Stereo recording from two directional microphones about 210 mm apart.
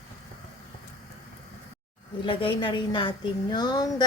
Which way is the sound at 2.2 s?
25° left (ahead or behind).